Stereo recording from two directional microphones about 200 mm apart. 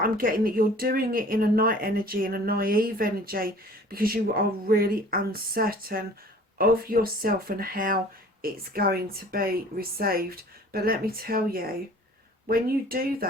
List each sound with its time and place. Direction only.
0.0 s speech: 45° right (ahead or behind)